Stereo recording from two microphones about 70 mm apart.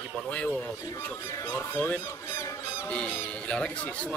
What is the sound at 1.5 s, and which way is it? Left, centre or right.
Speech, left.